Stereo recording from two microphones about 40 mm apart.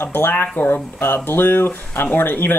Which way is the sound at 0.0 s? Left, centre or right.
Left.